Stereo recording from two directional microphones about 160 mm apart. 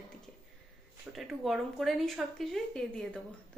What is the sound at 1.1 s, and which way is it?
A woman's voice, centre (ahead or behind).